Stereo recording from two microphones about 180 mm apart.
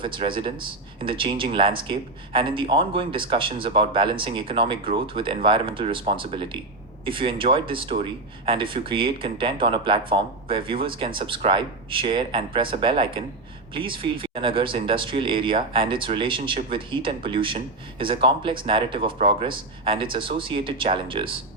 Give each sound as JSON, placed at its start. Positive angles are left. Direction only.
{"t": 0.0, "sound": "speech", "side_deg": -30}